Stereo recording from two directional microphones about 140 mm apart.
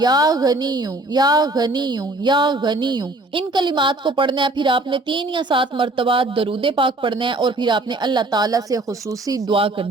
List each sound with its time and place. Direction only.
0.0 s speech: 30° right (ahead or behind)
9.5 s speech: 40° right (ahead or behind)